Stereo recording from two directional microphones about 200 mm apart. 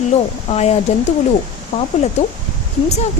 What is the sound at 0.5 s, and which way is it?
Speech, 35° left (ahead or behind).